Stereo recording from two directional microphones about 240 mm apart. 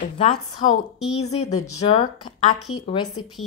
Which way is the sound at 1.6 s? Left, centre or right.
Centre.